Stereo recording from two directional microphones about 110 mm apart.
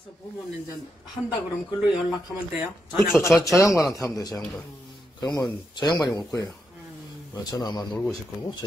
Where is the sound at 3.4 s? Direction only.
30° left (ahead or behind).